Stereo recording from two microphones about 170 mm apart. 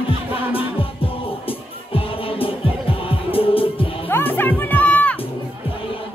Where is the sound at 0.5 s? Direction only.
35° left (ahead or behind).